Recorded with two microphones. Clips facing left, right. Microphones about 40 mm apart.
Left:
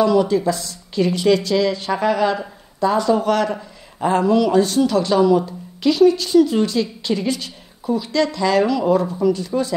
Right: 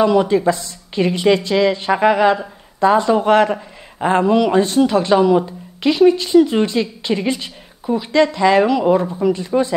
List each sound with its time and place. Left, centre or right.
0.0 s speech: right